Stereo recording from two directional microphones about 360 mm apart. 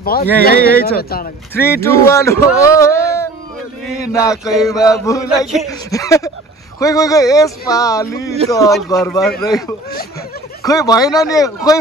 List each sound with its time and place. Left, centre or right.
0.0 s speech: left
1.5 s speech: centre
10.6 s speech: centre